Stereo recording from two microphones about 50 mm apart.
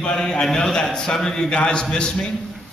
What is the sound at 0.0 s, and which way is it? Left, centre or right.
A man's voice, centre.